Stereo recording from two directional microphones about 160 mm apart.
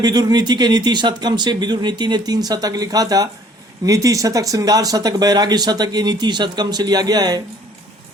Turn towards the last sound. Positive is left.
turn(degrees=-25)  # may be behind; listen again after turning